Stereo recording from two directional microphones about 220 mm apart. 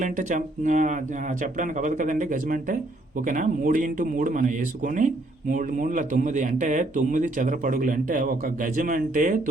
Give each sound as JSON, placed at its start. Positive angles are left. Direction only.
{"t": 0.0, "sound": "speech", "side_deg": -35}